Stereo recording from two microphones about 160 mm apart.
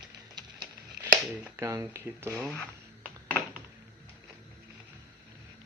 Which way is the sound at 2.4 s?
Centre (ahead or behind).